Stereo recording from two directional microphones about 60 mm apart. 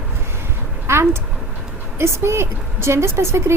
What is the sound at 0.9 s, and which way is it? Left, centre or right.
Speech, right.